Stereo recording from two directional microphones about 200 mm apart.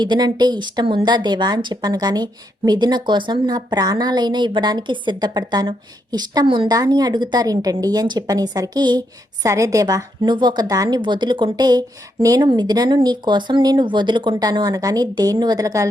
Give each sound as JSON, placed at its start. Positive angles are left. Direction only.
{"t": 0.0, "sound": "a woman's voice", "side_deg": -20}